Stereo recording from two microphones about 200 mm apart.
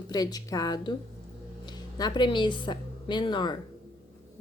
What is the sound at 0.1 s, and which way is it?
A woman's voice, 20° left (ahead or behind).